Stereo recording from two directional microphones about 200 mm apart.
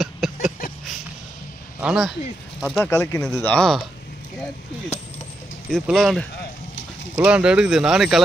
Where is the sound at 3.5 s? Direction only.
5° left (ahead or behind).